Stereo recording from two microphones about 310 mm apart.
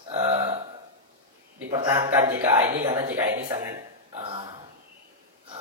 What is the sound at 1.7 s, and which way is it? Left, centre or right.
A man's voice, centre.